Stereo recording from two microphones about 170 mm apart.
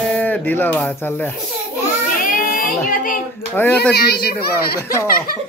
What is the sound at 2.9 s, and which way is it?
Speech, 55° left (ahead or behind).